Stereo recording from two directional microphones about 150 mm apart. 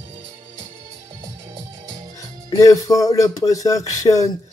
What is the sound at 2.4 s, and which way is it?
Speech, 20° left (ahead or behind).